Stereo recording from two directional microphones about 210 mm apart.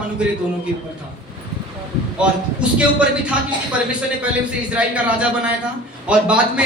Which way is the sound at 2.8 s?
5° right (ahead or behind).